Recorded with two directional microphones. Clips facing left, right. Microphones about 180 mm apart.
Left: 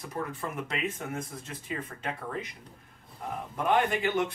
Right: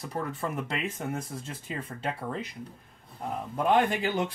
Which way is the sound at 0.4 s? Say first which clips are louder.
Right 1 dB; 35° right (ahead or behind).